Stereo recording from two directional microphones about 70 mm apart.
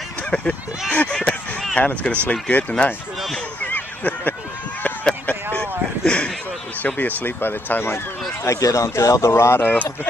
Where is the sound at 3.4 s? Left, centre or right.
Left.